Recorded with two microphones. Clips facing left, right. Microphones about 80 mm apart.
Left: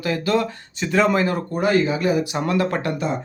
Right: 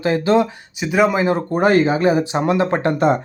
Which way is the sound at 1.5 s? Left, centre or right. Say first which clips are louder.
Right 4 dB; right.